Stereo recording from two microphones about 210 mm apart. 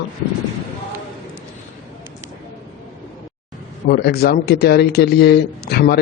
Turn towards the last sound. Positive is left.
turn(degrees=50)  # may be behind; listen again after turning